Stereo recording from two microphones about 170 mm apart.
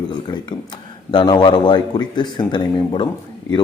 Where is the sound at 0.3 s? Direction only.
20° left (ahead or behind).